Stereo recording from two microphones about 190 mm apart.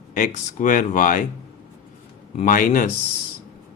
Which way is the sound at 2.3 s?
45° left (ahead or behind).